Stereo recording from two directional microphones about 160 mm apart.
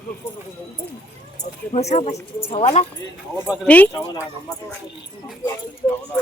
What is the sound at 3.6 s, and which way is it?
Speech, 10° left (ahead or behind).